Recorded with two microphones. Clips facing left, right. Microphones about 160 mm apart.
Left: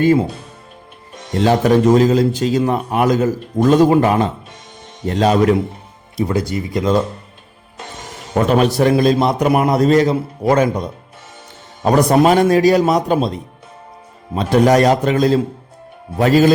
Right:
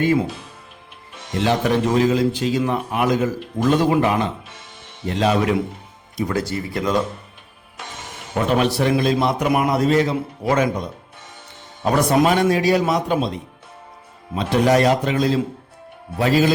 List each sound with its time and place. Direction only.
0.0 s a man's voice: 35° left (ahead or behind)
1.4 s a man's voice: 40° left (ahead or behind)
6.1 s speech: 25° left (ahead or behind)
8.4 s a man's voice: 45° left (ahead or behind)
14.3 s speech: 45° left (ahead or behind)